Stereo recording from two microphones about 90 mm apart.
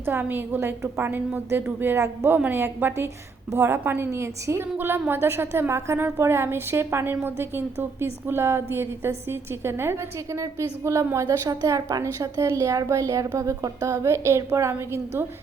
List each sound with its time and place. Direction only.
0.0 s a woman's voice: 20° right (ahead or behind)